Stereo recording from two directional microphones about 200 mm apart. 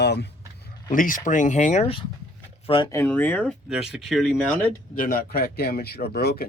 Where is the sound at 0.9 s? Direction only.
40° left (ahead or behind).